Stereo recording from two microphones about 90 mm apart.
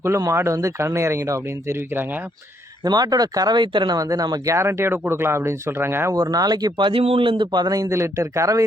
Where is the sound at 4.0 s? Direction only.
40° right (ahead or behind).